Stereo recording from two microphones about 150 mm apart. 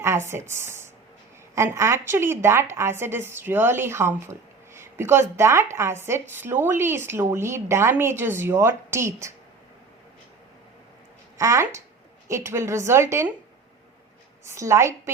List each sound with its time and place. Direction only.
0.0 s a woman's voice: 15° right (ahead or behind)
11.3 s a woman's voice: 20° right (ahead or behind)
14.4 s a woman's voice: 20° right (ahead or behind)